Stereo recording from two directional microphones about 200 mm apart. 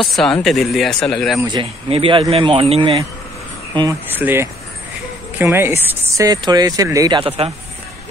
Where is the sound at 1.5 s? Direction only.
25° right (ahead or behind).